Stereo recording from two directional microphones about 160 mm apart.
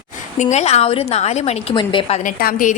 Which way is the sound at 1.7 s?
30° left (ahead or behind).